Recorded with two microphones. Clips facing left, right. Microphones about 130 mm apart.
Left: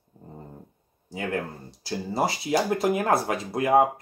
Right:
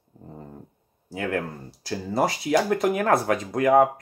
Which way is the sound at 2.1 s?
25° left (ahead or behind).